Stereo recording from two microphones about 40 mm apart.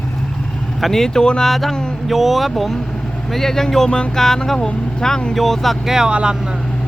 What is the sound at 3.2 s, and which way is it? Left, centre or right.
Speech, centre.